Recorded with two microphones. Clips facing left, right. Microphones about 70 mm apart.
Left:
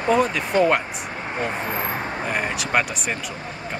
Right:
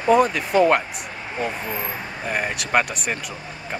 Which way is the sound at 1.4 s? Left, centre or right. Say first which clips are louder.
Left 1 dB; left.